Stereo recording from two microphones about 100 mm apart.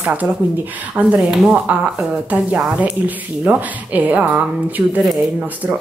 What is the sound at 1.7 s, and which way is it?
A woman's voice, 15° right (ahead or behind).